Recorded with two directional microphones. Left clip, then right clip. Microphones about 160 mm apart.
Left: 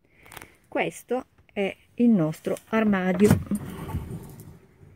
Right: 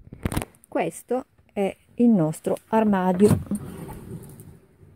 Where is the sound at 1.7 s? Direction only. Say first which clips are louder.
Right 2 dB; 25° right (ahead or behind).